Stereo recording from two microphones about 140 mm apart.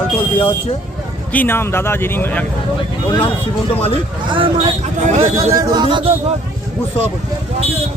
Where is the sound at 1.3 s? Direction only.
15° left (ahead or behind).